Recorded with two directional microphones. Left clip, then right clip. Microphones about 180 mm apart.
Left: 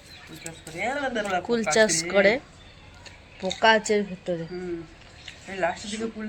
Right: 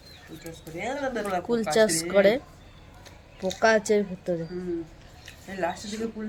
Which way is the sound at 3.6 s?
10° right (ahead or behind).